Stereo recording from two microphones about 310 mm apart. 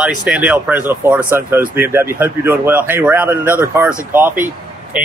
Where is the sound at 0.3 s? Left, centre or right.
Centre.